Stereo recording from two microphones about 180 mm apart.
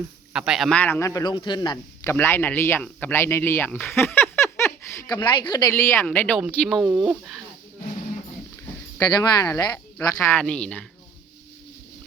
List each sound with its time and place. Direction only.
0.3 s a man's voice: 5° right (ahead or behind)
9.0 s speech: 20° left (ahead or behind)
10.2 s speech: 5° left (ahead or behind)